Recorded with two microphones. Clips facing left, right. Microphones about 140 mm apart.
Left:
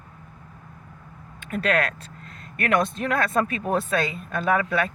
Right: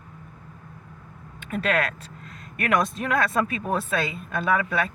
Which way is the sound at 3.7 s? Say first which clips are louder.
Left 2 dB; 40° left (ahead or behind).